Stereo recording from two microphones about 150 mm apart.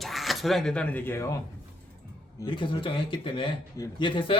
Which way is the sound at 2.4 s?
35° left (ahead or behind).